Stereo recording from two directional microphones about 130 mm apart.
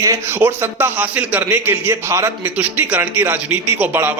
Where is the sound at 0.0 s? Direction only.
20° right (ahead or behind).